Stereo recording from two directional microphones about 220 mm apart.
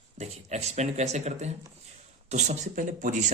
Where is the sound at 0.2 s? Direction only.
30° right (ahead or behind).